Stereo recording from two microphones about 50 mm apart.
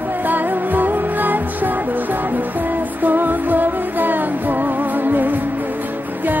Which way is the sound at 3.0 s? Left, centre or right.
Right.